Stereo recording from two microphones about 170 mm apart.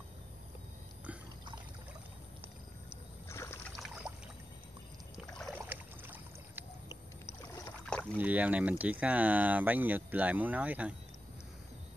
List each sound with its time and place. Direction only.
3.3 s a sound: 15° left (ahead or behind)
3.7 s boat: 5° right (ahead or behind)
5.7 s boat: 10° right (ahead or behind)
7.9 s rowboat: 5° left (ahead or behind)
8.2 s speech: 10° right (ahead or behind)